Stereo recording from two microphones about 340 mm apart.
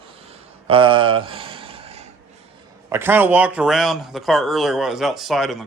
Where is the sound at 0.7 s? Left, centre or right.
Centre.